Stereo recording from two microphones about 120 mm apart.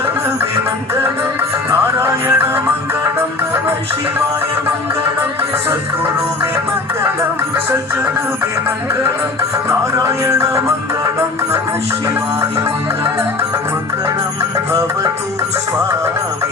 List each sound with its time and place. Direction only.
1.7 s music: 25° right (ahead or behind)
9.4 s music: 25° right (ahead or behind)